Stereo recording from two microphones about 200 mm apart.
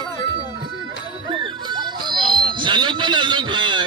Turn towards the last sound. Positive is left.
turn(degrees=-25)  # may be behind; listen again after turning